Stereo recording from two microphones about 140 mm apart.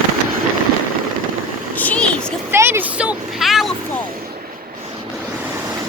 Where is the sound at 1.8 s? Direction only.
10° left (ahead or behind).